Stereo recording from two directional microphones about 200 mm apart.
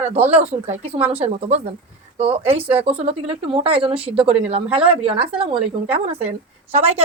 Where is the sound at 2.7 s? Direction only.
30° right (ahead or behind).